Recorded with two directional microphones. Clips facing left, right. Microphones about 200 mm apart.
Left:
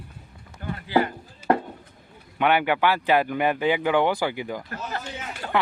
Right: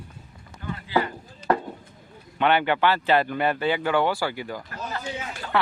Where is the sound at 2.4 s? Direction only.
10° left (ahead or behind).